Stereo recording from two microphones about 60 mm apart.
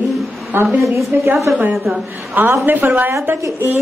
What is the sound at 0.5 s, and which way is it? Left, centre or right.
Speech, right.